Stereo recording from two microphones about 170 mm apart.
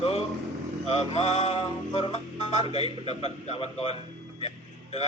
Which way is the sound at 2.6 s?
35° left (ahead or behind).